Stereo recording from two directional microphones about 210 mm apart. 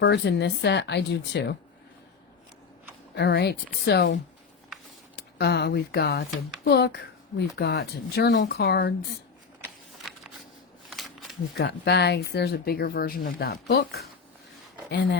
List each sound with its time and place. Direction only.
0.0 s speech: 55° left (ahead or behind)
3.2 s speech: 50° left (ahead or behind)
10.0 s a sound: centre (ahead or behind)
11.5 s speech: 50° left (ahead or behind)